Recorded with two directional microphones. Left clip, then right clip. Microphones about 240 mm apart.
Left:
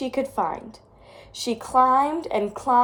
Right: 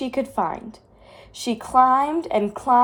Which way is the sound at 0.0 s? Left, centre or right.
Right.